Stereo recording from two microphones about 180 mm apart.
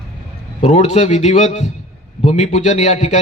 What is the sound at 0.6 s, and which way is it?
A man's voice, 35° left (ahead or behind).